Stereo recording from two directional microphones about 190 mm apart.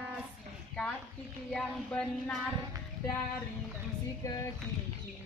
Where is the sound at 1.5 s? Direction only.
5° left (ahead or behind).